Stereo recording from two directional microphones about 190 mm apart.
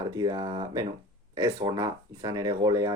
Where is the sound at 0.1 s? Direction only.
20° right (ahead or behind).